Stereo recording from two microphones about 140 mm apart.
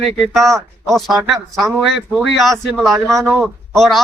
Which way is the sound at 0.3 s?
Centre (ahead or behind).